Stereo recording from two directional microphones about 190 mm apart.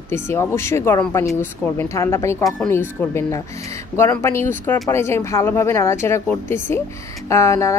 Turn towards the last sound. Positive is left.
turn(degrees=15)  # may be behind; listen again after turning